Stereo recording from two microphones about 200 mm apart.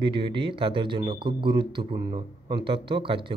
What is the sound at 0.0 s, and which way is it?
Speech, 25° right (ahead or behind).